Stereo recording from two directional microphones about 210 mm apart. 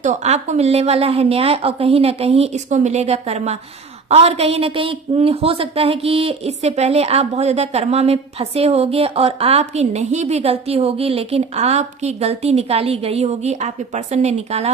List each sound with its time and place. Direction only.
0.0 s a woman's voice: 35° right (ahead or behind)